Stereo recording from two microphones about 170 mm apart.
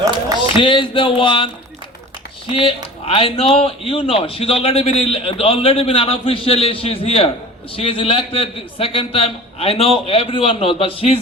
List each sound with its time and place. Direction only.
0.5 s speech: 30° left (ahead or behind)
2.5 s a man's voice: 30° left (ahead or behind)